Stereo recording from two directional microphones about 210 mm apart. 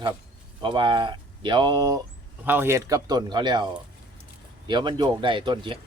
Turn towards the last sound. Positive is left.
turn(degrees=-20)  # may be behind; listen again after turning